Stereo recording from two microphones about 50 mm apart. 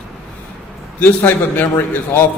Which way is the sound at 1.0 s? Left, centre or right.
Left.